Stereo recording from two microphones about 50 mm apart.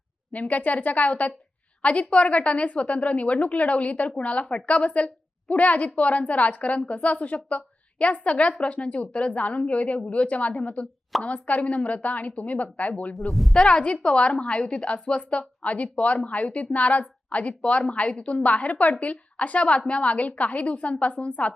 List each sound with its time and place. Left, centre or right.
0.3 s a woman's voice: left
13.1 s speech: centre
13.5 s a woman's voice: centre